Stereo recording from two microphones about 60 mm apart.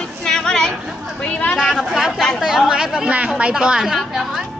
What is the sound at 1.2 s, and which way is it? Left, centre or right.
Speech, left.